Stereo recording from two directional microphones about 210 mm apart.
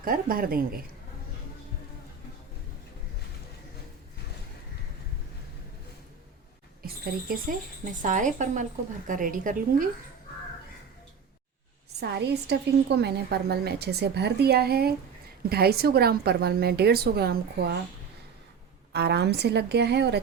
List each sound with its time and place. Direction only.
0.0 s a woman's voice: 45° right (ahead or behind)
7.3 s a woman's voice: 45° right (ahead or behind)
11.9 s a woman's voice: 50° right (ahead or behind)
18.9 s a woman's voice: 50° right (ahead or behind)